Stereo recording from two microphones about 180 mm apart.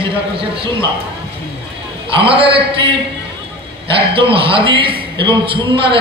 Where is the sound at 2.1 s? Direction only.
30° right (ahead or behind).